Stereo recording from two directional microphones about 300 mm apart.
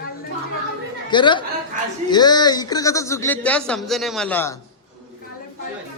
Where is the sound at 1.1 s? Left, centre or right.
Centre.